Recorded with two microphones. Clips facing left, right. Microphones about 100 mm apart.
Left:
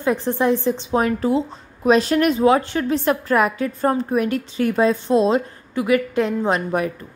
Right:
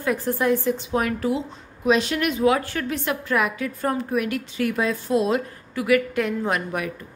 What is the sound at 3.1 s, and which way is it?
A woman's voice, 40° left (ahead or behind).